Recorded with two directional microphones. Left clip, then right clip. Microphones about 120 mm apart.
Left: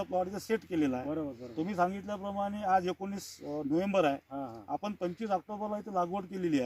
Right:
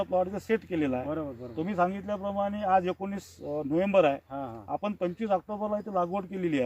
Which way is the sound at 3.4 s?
Centre (ahead or behind).